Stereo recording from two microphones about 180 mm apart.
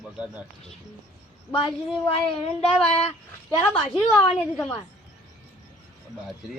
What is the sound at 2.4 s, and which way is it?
Child singing, 35° left (ahead or behind).